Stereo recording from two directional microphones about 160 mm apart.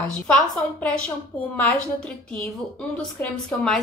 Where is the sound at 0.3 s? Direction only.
5° left (ahead or behind).